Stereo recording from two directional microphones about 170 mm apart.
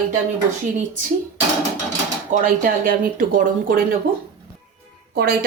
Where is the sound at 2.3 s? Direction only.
50° right (ahead or behind).